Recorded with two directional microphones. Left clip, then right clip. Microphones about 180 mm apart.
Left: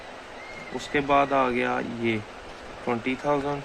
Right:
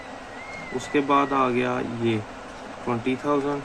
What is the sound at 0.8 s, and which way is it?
Speech, 40° left (ahead or behind).